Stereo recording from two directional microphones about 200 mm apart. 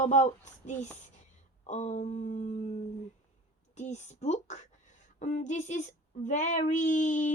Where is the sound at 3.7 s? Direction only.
35° left (ahead or behind).